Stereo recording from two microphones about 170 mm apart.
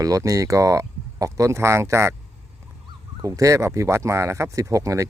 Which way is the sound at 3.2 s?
20° right (ahead or behind).